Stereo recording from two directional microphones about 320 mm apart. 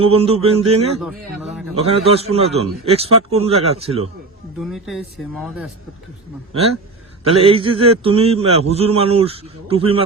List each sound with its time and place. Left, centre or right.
0.0 s a man's voice: centre
4.6 s speech: centre
7.3 s a man's voice: centre